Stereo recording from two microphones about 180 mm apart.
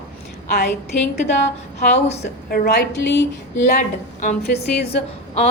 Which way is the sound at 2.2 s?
65° left (ahead or behind).